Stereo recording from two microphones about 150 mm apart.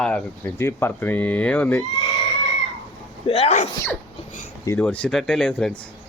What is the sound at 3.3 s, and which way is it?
Speech, 45° left (ahead or behind).